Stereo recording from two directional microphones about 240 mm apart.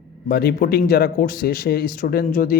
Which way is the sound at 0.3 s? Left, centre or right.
Left.